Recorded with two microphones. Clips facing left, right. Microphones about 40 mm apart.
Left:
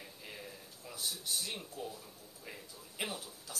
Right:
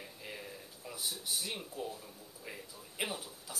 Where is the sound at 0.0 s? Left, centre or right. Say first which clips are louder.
Right 2 dB; centre.